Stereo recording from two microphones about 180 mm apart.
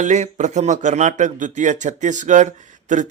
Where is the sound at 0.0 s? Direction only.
40° right (ahead or behind).